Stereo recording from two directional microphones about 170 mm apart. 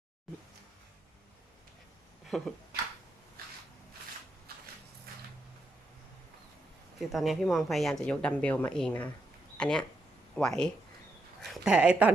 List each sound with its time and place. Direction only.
2.3 s speech: centre (ahead or behind)
4.5 s a sound: 65° right (ahead or behind)
7.0 s speech: centre (ahead or behind)